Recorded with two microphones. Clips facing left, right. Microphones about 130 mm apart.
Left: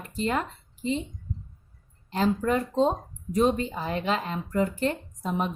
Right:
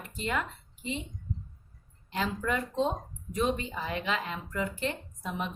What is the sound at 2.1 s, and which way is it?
A woman's voice, 35° left (ahead or behind).